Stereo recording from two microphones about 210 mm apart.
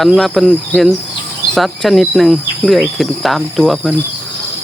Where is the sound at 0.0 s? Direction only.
Centre (ahead or behind).